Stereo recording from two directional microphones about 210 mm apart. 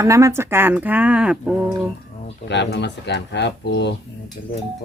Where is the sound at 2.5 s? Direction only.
55° left (ahead or behind).